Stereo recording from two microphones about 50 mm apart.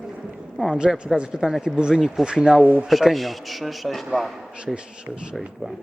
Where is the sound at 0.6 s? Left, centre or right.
Centre.